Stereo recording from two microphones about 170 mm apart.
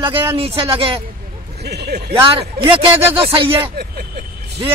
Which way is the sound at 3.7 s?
65° right (ahead or behind).